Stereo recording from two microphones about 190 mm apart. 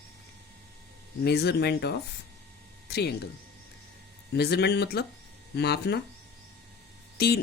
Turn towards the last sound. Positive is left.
turn(degrees=55)  # may be behind; listen again after turning